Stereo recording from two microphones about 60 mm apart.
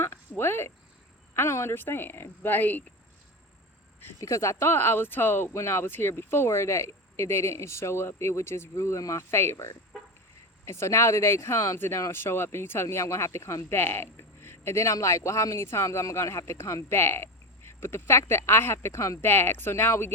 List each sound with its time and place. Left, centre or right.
0.0 s a sound: left
1.3 s a woman's voice: left
4.2 s a woman's voice: left
9.3 s speech: left
13.7 s a woman's voice: left